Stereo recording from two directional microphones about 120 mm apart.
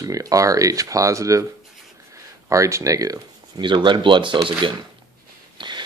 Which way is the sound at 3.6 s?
40° right (ahead or behind).